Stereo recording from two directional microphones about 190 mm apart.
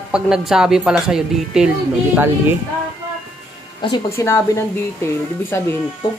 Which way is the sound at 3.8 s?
20° left (ahead or behind).